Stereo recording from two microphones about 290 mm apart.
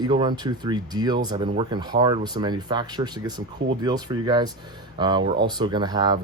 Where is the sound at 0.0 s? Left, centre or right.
Centre.